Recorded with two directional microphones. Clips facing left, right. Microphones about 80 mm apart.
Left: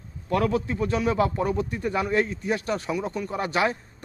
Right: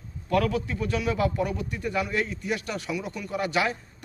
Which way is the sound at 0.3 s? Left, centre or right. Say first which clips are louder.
Left 1 dB; left.